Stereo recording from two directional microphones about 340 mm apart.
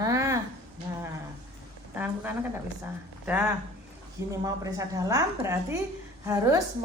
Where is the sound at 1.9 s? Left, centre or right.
Centre.